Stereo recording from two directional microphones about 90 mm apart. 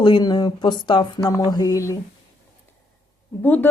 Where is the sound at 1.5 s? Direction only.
45° left (ahead or behind).